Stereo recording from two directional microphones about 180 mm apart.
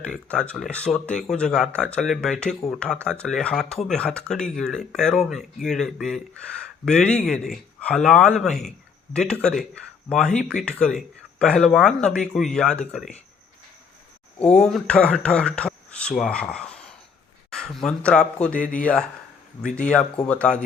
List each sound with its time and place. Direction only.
0.0 s speech: 5° left (ahead or behind)
14.6 s speech: 5° left (ahead or behind)
18.6 s speech: 45° left (ahead or behind)
19.8 s speech: 5° left (ahead or behind)